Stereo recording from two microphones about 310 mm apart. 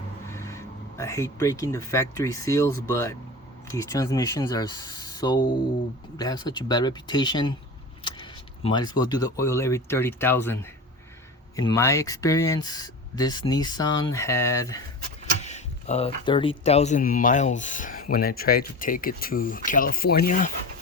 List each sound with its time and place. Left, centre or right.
0.3 s speech: centre
15.4 s speech: left